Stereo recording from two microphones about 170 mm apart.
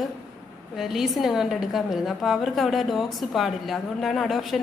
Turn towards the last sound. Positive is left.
turn(degrees=0)  # may be behind; listen again after turning